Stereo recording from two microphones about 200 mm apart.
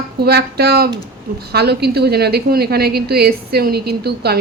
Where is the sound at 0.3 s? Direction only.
50° right (ahead or behind).